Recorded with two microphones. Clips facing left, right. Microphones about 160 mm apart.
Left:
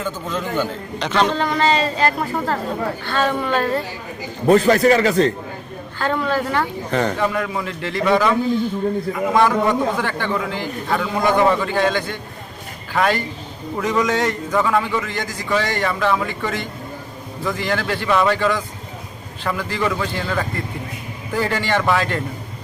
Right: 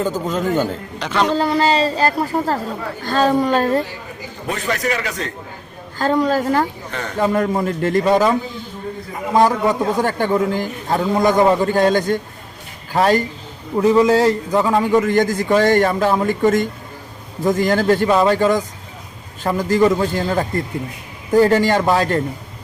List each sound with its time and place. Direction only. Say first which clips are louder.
0.0 s a man's voice: right 5 dB; 40° right (ahead or behind)
0.9 s a man's voice: even; 5° right (ahead or behind)
1.4 s a man's voice: right 2 dB; 35° right (ahead or behind)
4.4 s speech: left 9 dB; 35° left (ahead or behind)
6.0 s a man's voice: right 4 dB; 40° right (ahead or behind)
6.9 s speech: left 8 dB; 35° left (ahead or behind)
7.2 s a man's voice: right 4 dB; 40° right (ahead or behind)